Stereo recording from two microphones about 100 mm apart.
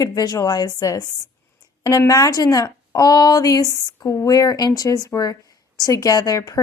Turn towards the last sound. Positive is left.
turn(degrees=35)  # may be behind; listen again after turning